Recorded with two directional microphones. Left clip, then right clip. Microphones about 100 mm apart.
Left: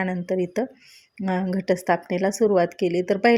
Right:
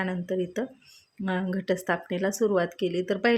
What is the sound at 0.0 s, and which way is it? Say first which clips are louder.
A woman's voice: left 4 dB; 40° left (ahead or behind).